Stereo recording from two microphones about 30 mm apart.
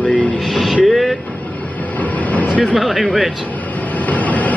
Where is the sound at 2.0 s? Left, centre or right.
Left.